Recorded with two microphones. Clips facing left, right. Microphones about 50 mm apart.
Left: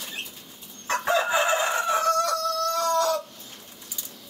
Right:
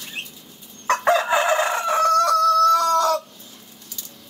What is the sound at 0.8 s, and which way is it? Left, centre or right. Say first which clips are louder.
Chicken: right 5 dB; right.